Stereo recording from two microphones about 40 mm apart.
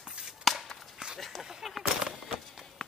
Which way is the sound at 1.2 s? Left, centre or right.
Centre.